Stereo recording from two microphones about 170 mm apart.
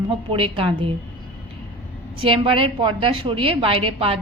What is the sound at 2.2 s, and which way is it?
A woman's voice, 30° right (ahead or behind).